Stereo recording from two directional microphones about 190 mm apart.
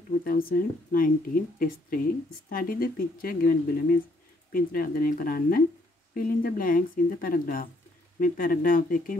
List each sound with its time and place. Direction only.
0.2 s speech: 50° left (ahead or behind)